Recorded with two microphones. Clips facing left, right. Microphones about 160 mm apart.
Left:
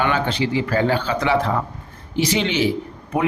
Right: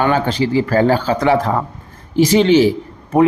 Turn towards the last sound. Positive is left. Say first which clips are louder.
# right 9 dB
turn(degrees=-40)  # may be behind; listen again after turning